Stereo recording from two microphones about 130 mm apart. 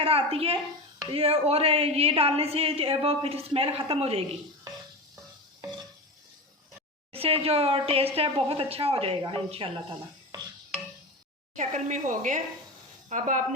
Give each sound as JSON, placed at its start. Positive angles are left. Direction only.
{"t": 0.0, "sound": "a woman's voice", "side_deg": -50}
{"t": 7.1, "sound": "a woman's voice", "side_deg": -50}
{"t": 11.5, "sound": "speech", "side_deg": -70}